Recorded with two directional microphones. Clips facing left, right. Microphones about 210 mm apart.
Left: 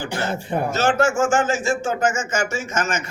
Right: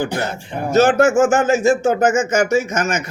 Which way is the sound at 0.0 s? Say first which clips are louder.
Right 4 dB; 40° right (ahead or behind).